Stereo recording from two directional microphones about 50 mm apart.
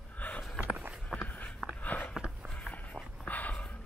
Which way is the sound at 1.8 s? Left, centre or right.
Left.